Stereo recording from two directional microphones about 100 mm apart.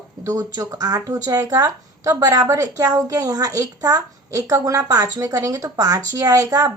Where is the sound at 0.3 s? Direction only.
40° right (ahead or behind).